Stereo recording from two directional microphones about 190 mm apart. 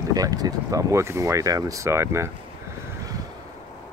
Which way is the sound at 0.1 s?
20° right (ahead or behind).